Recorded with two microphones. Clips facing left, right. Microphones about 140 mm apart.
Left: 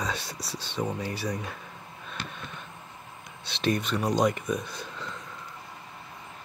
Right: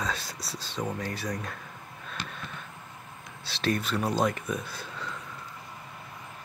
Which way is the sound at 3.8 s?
5° right (ahead or behind).